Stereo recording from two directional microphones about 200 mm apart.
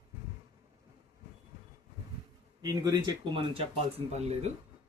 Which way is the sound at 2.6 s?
20° right (ahead or behind).